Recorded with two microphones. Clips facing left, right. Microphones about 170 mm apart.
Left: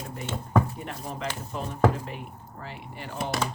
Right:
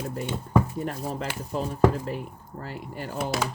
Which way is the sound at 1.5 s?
35° right (ahead or behind).